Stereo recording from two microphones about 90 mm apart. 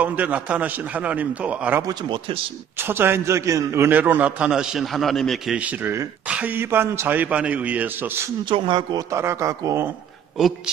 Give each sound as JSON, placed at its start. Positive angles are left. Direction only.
{"t": 0.0, "sound": "a man's voice", "side_deg": -15}
{"t": 2.0, "sound": "a man's voice", "side_deg": -70}
{"t": 2.8, "sound": "a man's voice", "side_deg": -25}
{"t": 4.4, "sound": "a man's voice", "side_deg": -10}
{"t": 5.5, "sound": "a man's voice", "side_deg": -15}
{"t": 8.5, "sound": "speech", "side_deg": -65}
{"t": 9.1, "sound": "a man's voice", "side_deg": -30}
{"t": 10.4, "sound": "a man's voice", "side_deg": -5}